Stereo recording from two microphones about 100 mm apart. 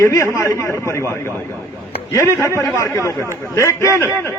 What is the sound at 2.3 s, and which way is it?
A man's voice, 30° left (ahead or behind).